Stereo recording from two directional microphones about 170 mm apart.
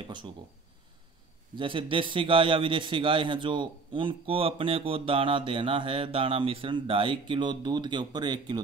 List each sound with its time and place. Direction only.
1.6 s a man's voice: 30° right (ahead or behind)